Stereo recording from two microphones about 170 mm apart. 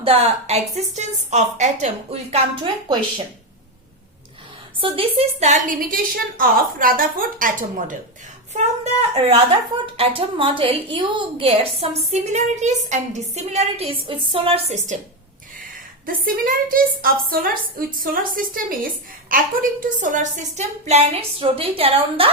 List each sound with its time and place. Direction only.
0.0 s a woman's voice: 35° right (ahead or behind)
4.8 s a woman's voice: 35° right (ahead or behind); by 7.9 s 50° right (ahead or behind)
8.5 s a woman's voice: 40° right (ahead or behind)
16.0 s a woman's voice: 55° right (ahead or behind); by 22.3 s 35° right (ahead or behind)